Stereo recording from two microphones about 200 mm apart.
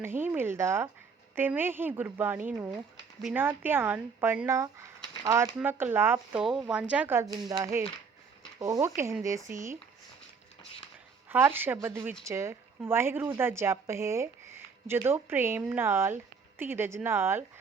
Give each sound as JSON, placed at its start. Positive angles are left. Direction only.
{"t": 0.0, "sound": "a woman's voice", "side_deg": -10}
{"t": 11.3, "sound": "a woman's voice", "side_deg": -10}